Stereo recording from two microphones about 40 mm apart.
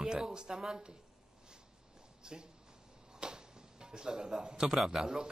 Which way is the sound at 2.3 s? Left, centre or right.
Centre.